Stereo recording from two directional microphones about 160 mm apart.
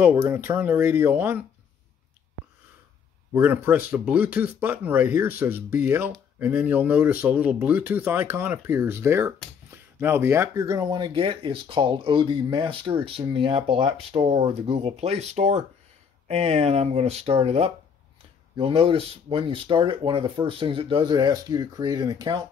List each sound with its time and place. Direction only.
0.0 s speech: 10° right (ahead or behind)
3.3 s speech: 10° right (ahead or behind)